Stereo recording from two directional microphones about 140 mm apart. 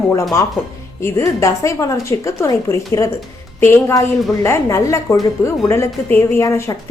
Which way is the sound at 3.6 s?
15° left (ahead or behind).